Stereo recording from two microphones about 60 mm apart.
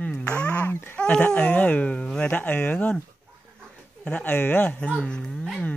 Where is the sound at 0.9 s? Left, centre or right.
Centre.